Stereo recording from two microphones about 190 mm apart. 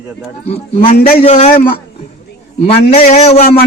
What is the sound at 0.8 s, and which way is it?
Speech, 35° left (ahead or behind).